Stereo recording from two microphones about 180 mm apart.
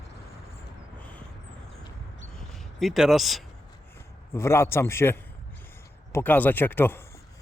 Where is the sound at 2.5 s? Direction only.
Centre (ahead or behind).